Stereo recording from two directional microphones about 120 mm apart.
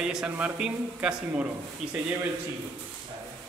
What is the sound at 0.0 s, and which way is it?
A man's voice, 5° right (ahead or behind).